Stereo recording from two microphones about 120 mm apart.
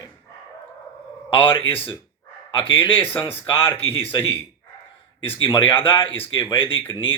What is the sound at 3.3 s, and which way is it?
Speech, 15° left (ahead or behind).